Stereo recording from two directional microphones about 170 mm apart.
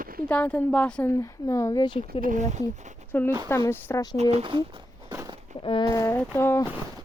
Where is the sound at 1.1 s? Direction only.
20° left (ahead or behind).